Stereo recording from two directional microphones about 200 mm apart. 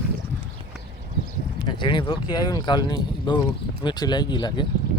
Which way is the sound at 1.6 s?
25° left (ahead or behind).